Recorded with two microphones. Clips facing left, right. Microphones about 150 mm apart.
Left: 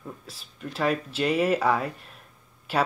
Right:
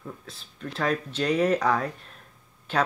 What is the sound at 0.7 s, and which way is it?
Speech, 5° left (ahead or behind).